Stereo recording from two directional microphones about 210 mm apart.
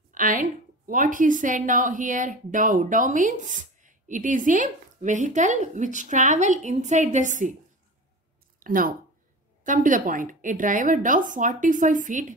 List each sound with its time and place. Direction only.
0.1 s a woman's voice: 40° right (ahead or behind)
8.5 s a woman's voice: 40° right (ahead or behind)